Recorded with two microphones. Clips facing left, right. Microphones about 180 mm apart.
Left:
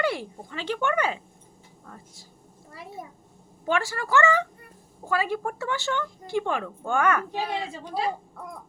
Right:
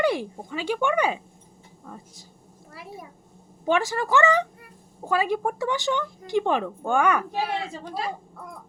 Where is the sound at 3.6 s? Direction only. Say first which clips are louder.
Right 4 dB; 20° right (ahead or behind).